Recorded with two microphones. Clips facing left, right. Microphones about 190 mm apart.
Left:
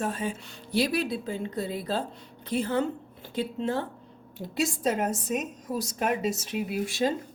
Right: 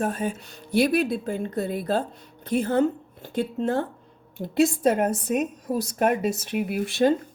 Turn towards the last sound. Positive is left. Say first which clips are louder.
# right 5 dB
turn(degrees=-55)  # may be behind; listen again after turning